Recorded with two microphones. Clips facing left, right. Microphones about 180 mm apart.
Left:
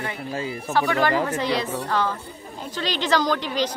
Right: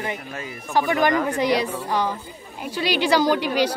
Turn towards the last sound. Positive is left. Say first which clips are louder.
# right 3 dB
turn(degrees=-10)  # may be behind; listen again after turning